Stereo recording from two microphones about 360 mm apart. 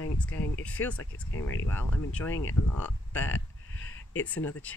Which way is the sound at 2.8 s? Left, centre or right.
Centre.